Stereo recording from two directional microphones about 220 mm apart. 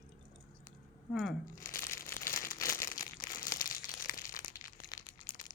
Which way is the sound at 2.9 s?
40° left (ahead or behind).